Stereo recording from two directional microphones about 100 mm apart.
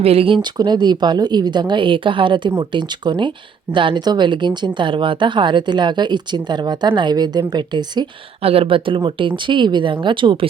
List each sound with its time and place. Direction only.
0.0 s speech: 75° right (ahead or behind)
0.5 s speech: 45° right (ahead or behind)
8.4 s speech: 75° right (ahead or behind); by 10.5 s 55° right (ahead or behind)